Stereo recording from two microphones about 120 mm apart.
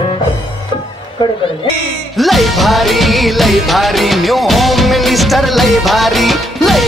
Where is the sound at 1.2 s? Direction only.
45° left (ahead or behind).